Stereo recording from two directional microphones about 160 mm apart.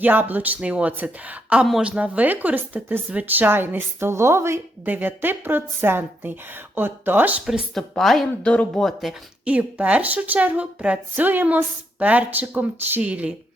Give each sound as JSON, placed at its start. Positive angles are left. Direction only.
{"t": 0.0, "sound": "speech", "side_deg": -10}